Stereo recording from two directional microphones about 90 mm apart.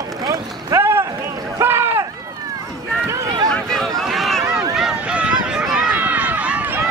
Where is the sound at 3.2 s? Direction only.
55° right (ahead or behind).